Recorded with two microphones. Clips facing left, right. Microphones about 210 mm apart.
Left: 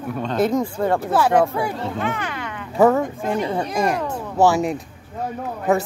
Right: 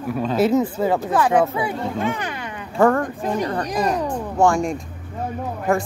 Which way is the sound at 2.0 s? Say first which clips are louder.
Right 1 dB; 15° right (ahead or behind).